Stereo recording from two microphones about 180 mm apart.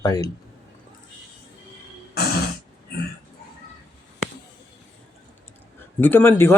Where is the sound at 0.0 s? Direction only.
20° left (ahead or behind).